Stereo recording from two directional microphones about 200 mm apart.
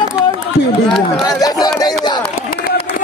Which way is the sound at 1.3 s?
20° left (ahead or behind).